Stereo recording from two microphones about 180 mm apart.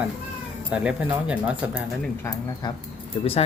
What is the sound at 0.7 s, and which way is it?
Speech, 5° right (ahead or behind).